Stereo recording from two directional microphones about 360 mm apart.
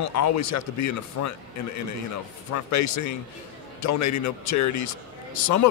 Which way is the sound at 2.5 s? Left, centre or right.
Left.